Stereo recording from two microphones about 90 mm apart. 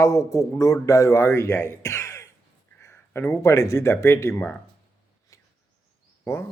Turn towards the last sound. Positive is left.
turn(degrees=30)  # may be behind; listen again after turning